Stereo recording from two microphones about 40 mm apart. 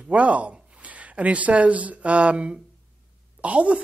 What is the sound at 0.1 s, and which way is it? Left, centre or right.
A woman's voice, right.